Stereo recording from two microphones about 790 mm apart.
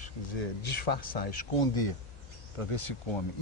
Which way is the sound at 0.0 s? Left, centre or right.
Left.